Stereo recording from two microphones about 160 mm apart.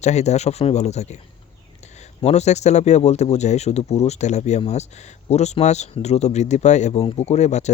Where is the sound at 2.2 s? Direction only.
40° left (ahead or behind).